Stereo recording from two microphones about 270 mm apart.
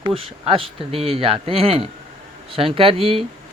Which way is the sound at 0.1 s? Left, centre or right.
Centre.